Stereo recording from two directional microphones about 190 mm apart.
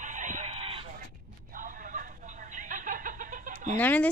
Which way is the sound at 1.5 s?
45° right (ahead or behind).